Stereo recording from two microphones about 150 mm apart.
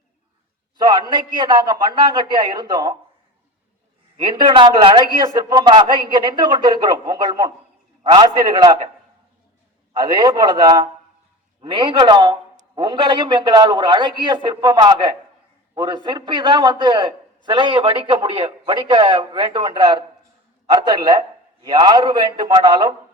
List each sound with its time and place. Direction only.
0.8 s a man's voice: 25° right (ahead or behind)
4.2 s speech: 30° right (ahead or behind)
9.9 s a man's voice: 30° right (ahead or behind)